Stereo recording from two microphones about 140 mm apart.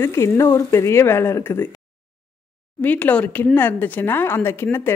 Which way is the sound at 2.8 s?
10° left (ahead or behind).